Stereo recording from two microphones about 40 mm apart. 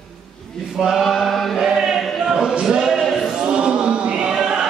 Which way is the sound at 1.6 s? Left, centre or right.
Centre.